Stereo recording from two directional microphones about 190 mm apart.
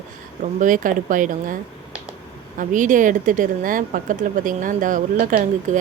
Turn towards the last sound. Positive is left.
turn(degrees=-45)  # may be behind; listen again after turning